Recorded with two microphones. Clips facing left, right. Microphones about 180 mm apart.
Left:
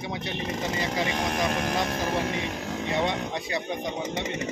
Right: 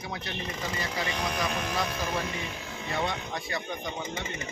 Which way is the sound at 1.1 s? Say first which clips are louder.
Left 4 dB; 55° left (ahead or behind).